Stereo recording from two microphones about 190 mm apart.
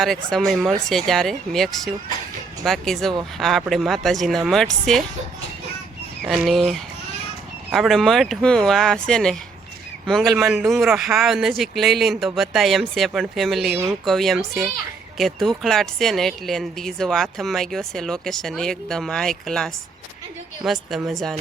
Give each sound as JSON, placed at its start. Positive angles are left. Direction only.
{"t": 0.0, "sound": "speech", "side_deg": 0}
{"t": 6.2, "sound": "speech", "side_deg": 0}